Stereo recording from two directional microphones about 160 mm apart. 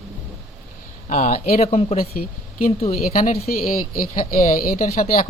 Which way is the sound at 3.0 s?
60° left (ahead or behind).